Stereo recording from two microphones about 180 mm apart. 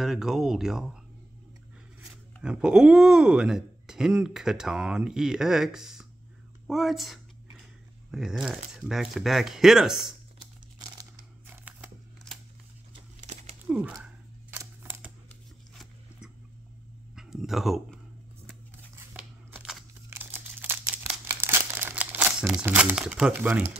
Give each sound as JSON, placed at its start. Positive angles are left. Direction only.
{"t": 0.0, "sound": "speech", "side_deg": -5}
{"t": 2.0, "sound": "speech", "side_deg": -5}
{"t": 10.8, "sound": "crumpling", "side_deg": -15}
{"t": 12.3, "sound": "a sound", "side_deg": 5}
{"t": 13.2, "sound": "crumpling", "side_deg": -40}
{"t": 13.7, "sound": "speech", "side_deg": -5}
{"t": 14.0, "sound": "camera", "side_deg": -10}
{"t": 17.1, "sound": "a sound", "side_deg": -5}
{"t": 19.1, "sound": "crumpling", "side_deg": -5}